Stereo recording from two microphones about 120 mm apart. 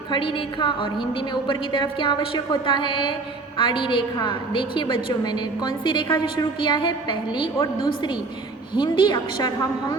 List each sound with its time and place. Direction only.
0.1 s a woman's voice: 45° left (ahead or behind)
8.7 s a woman's voice: 40° left (ahead or behind)